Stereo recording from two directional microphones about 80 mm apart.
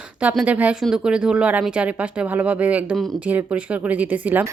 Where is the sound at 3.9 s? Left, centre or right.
Right.